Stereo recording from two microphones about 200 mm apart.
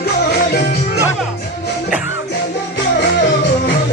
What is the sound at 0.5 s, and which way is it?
Music, 55° left (ahead or behind).